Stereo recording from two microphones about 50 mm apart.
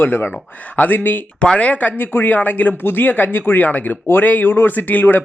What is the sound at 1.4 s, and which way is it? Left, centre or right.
A man's voice, left.